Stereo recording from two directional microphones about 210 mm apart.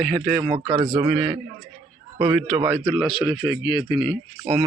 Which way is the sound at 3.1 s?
20° left (ahead or behind).